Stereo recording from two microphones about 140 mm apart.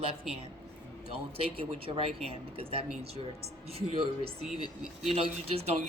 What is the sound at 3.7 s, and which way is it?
Speech, 45° right (ahead or behind).